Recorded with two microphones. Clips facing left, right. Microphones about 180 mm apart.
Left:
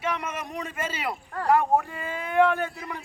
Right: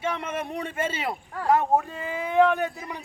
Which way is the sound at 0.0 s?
25° right (ahead or behind).